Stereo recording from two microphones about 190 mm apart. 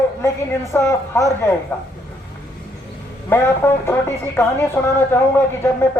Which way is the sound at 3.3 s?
10° left (ahead or behind).